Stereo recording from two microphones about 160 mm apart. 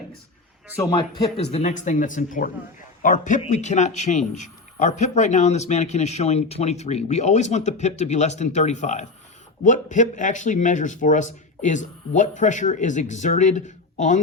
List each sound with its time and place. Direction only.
0.8 s speech: 25° left (ahead or behind)
1.5 s a man's voice: 45° left (ahead or behind)